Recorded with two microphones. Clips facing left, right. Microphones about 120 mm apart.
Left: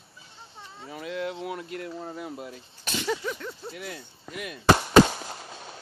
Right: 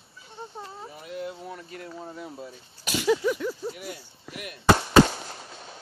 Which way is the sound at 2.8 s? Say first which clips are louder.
Right 6 dB; 5° right (ahead or behind).